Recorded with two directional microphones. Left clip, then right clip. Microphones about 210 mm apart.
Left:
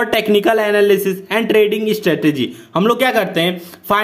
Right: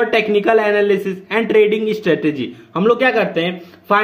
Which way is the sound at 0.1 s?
30° left (ahead or behind).